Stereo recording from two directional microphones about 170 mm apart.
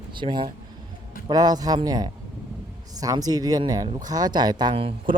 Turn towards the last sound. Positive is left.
turn(degrees=-30)  # may be behind; listen again after turning